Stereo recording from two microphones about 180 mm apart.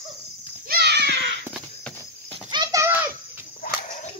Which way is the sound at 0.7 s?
65° right (ahead or behind).